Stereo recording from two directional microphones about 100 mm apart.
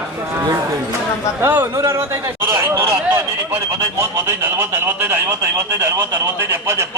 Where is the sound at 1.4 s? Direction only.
25° right (ahead or behind).